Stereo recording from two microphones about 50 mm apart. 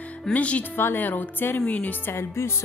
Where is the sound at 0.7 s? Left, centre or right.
Left.